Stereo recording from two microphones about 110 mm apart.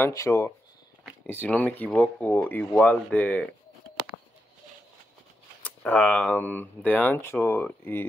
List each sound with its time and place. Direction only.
0.0 s speech: 30° left (ahead or behind)
1.2 s speech: 15° left (ahead or behind)
5.6 s speech: 10° left (ahead or behind)